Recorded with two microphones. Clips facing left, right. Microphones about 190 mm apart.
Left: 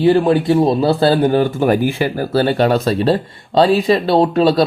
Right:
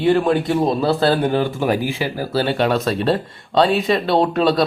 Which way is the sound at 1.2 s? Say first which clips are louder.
Left 5 dB; 40° left (ahead or behind).